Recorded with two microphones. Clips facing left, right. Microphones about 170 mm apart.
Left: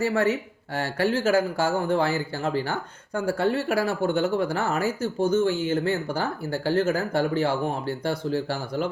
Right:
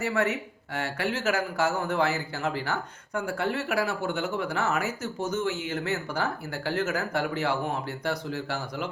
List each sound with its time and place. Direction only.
0.0 s speech: 35° left (ahead or behind)